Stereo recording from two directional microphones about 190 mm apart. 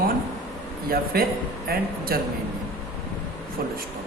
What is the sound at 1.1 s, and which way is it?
A woman's voice, 50° right (ahead or behind).